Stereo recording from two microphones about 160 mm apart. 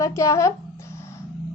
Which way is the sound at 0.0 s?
20° left (ahead or behind).